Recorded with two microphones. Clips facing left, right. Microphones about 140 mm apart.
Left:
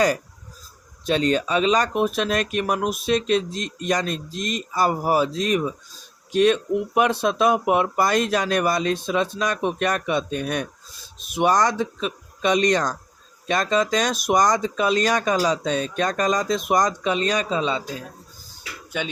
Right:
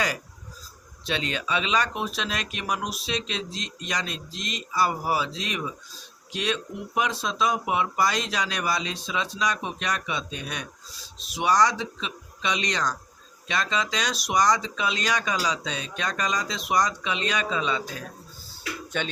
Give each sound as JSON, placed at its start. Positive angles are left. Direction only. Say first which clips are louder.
{"t": 1.0, "sound": "speech", "louder": "left 9 dB", "side_deg": 40}
{"t": 18.9, "sound": "speech", "louder": "left 2 dB", "side_deg": 5}